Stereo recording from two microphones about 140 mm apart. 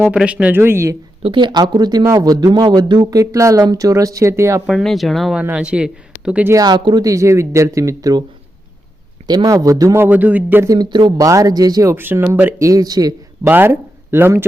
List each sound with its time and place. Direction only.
0.1 s speech: 5° right (ahead or behind)
1.2 s speech: 35° right (ahead or behind); by 4.6 s 20° right (ahead or behind)
4.6 s speech: centre (ahead or behind)
6.5 s speech: 30° right (ahead or behind)
9.2 s speech: 30° right (ahead or behind)
10.8 s speech: 30° right (ahead or behind)
13.5 s speech: 15° right (ahead or behind)